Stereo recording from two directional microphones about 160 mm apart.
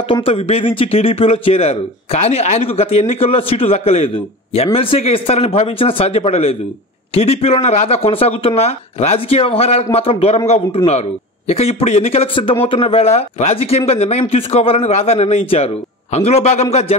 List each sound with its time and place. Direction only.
0.1 s speech: 35° left (ahead or behind)